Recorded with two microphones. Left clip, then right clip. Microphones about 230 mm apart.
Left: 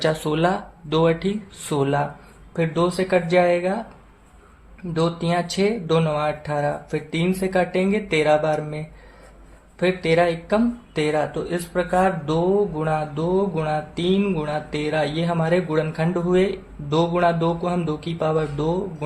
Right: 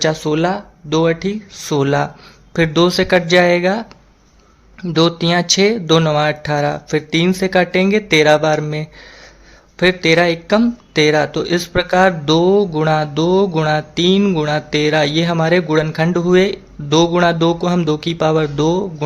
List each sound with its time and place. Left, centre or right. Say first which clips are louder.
0.0 s speech: right 5 dB; right